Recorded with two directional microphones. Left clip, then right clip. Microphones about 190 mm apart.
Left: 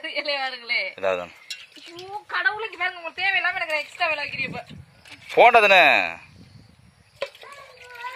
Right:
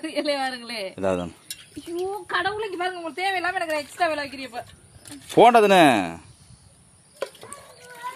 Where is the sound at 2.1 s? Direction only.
25° right (ahead or behind).